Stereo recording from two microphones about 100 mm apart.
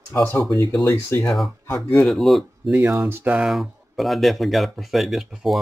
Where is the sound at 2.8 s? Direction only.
25° right (ahead or behind).